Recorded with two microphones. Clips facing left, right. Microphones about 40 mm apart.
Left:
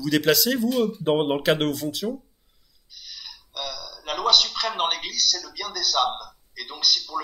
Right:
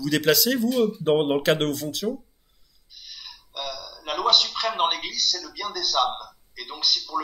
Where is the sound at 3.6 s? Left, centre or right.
Right.